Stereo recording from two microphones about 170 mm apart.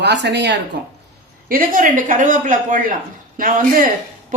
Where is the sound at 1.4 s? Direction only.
55° right (ahead or behind).